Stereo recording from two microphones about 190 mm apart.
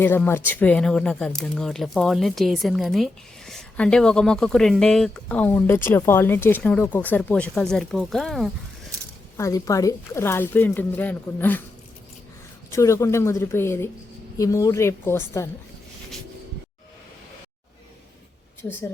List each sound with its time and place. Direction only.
0.0 s speech: 10° left (ahead or behind)
9.4 s speech: 15° left (ahead or behind)
12.7 s speech: 15° left (ahead or behind)